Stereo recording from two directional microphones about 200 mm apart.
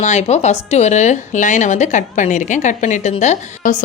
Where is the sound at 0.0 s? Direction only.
35° left (ahead or behind).